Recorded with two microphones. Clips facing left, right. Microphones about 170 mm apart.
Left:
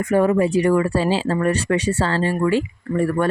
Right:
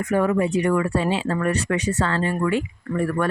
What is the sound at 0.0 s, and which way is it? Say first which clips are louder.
Speech: left 3 dB; 30° left (ahead or behind).